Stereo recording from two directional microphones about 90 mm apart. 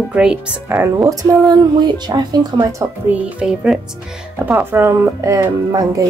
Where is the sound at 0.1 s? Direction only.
10° right (ahead or behind).